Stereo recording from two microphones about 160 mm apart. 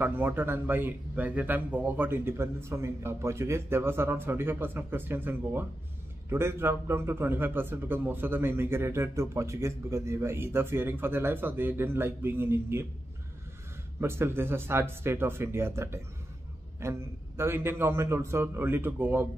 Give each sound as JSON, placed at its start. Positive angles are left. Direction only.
{"t": 0.0, "sound": "a man's voice", "side_deg": -10}
{"t": 13.9, "sound": "a man's voice", "side_deg": -15}